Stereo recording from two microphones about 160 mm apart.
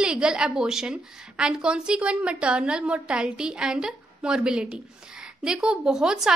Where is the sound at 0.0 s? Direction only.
5° right (ahead or behind).